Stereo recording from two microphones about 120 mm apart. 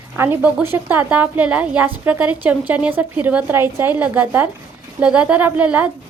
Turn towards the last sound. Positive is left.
turn(degrees=-10)  # may be behind; listen again after turning